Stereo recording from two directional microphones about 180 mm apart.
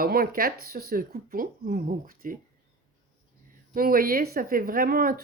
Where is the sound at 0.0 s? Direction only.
55° right (ahead or behind).